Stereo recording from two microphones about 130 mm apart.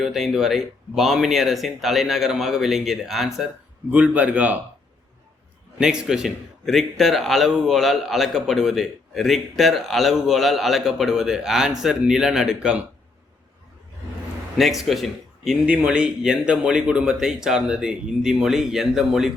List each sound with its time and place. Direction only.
0.0 s a man's voice: centre (ahead or behind)
5.8 s a man's voice: 5° right (ahead or behind)
14.6 s a man's voice: centre (ahead or behind)